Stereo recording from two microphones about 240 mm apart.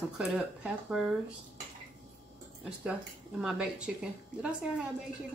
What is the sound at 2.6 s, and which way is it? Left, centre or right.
Speech, centre.